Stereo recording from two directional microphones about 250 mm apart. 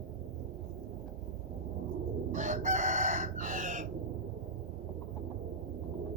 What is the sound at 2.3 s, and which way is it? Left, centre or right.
Chicken, right.